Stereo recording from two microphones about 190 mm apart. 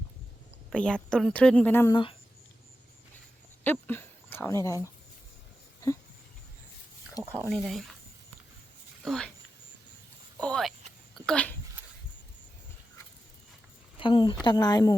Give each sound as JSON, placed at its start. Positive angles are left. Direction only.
{"t": 0.7, "sound": "a woman's voice", "side_deg": 5}
{"t": 3.6, "sound": "speech", "side_deg": 10}
{"t": 7.2, "sound": "speech", "side_deg": -10}
{"t": 7.5, "sound": "speech", "side_deg": 0}
{"t": 9.0, "sound": "speech", "side_deg": 5}
{"t": 10.4, "sound": "a sound", "side_deg": 5}
{"t": 11.3, "sound": "speech", "side_deg": 5}
{"t": 13.9, "sound": "speech", "side_deg": 25}